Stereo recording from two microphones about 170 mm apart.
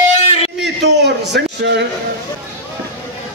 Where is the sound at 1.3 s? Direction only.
90° right.